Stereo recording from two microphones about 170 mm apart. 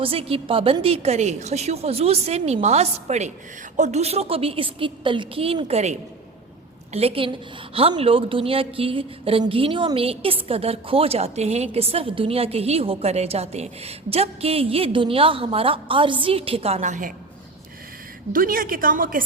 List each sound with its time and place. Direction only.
0.0 s speech: 35° right (ahead or behind)
18.3 s a woman's voice: 55° right (ahead or behind)